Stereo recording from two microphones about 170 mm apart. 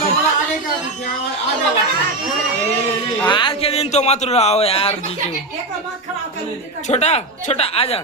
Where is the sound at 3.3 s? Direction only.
30° left (ahead or behind).